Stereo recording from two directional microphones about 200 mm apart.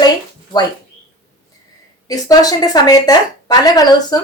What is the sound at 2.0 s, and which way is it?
A woman's voice, 20° left (ahead or behind).